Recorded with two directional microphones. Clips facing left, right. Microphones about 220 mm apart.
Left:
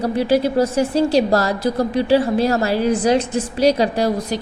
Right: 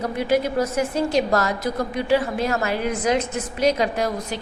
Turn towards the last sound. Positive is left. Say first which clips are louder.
# left 5 dB
turn(degrees=35)  # may be behind; listen again after turning